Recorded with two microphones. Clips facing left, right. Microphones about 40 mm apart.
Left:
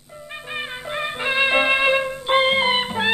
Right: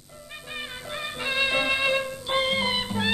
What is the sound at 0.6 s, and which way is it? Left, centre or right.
Music, left.